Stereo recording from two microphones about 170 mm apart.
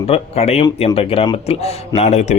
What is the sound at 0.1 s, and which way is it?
Speech, 40° left (ahead or behind).